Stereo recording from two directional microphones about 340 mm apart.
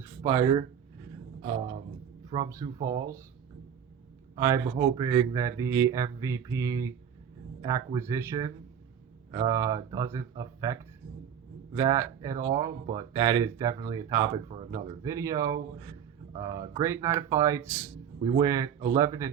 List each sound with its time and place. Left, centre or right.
0.2 s speech: centre
2.3 s speech: centre
4.4 s speech: centre